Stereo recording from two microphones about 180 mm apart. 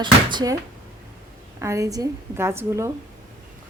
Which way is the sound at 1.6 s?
15° right (ahead or behind).